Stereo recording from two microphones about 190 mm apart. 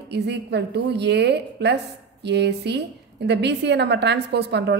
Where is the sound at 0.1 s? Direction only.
65° right (ahead or behind).